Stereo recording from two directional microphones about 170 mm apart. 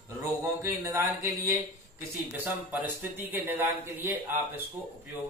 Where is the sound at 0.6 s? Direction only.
20° right (ahead or behind).